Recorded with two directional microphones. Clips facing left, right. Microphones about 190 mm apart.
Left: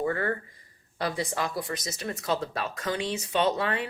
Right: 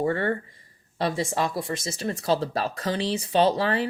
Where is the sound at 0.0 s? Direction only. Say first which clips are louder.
Right 3 dB; 30° right (ahead or behind).